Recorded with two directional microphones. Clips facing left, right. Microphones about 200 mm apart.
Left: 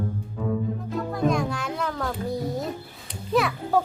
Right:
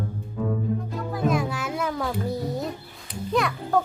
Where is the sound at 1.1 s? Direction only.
5° right (ahead or behind).